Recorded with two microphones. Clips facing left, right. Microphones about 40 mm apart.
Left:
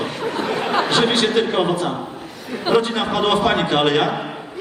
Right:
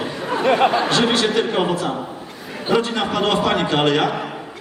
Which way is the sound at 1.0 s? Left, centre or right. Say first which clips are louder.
Left 1 dB; centre.